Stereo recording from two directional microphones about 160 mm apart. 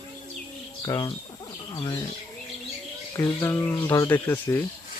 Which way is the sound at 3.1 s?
15° left (ahead or behind).